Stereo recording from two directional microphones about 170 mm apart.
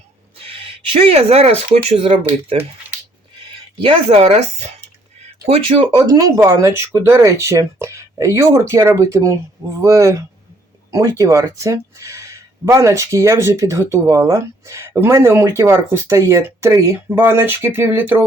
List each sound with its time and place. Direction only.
0.3 s speech: 35° right (ahead or behind)
3.8 s speech: 30° right (ahead or behind)
6.0 s speech: 20° right (ahead or behind)